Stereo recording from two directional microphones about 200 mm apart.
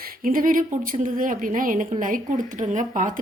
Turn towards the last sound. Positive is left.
turn(degrees=-40)  # may be behind; listen again after turning